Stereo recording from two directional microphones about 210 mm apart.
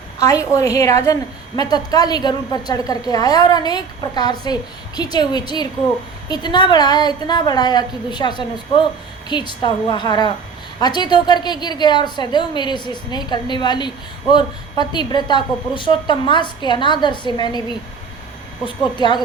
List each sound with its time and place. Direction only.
0.2 s a woman's voice: 15° left (ahead or behind)